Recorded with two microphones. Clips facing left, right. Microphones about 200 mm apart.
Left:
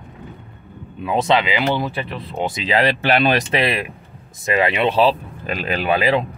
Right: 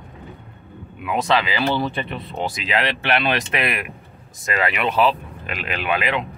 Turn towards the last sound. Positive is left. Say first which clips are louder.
# left 5 dB
turn(degrees=35)  # may be behind; listen again after turning